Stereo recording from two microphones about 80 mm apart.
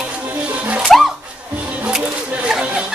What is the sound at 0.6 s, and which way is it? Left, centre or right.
Music, centre.